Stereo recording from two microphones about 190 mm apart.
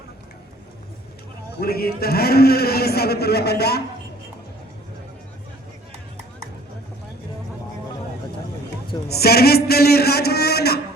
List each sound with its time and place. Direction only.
1.6 s a man's voice: 55° left (ahead or behind)
9.0 s a man's voice: 55° left (ahead or behind)